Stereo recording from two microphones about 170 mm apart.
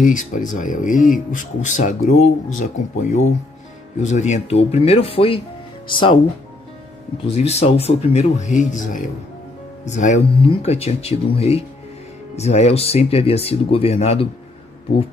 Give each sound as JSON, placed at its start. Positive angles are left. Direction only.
{"t": 0.0, "sound": "speech", "side_deg": 50}
{"t": 7.2, "sound": "speech", "side_deg": 40}